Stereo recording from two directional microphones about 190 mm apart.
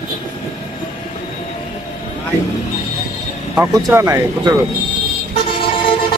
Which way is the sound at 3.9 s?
15° right (ahead or behind).